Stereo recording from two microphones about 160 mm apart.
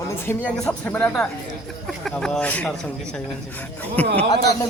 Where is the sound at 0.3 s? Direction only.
10° left (ahead or behind).